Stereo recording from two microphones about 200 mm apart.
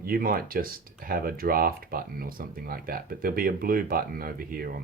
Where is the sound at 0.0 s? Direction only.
45° right (ahead or behind).